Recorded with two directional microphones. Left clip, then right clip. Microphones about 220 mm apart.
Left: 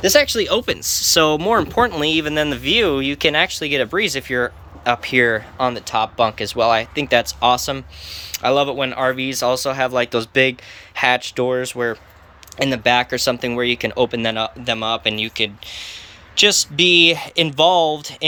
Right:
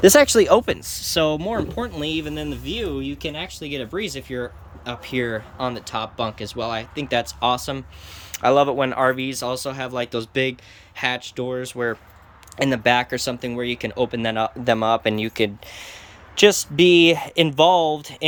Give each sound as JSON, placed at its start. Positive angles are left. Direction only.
{"t": 0.0, "sound": "speech", "side_deg": -35}
{"t": 14.6, "sound": "speech", "side_deg": -25}